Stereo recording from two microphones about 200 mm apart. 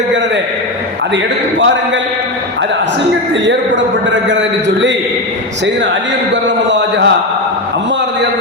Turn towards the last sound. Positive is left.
turn(degrees=-60)  # may be behind; listen again after turning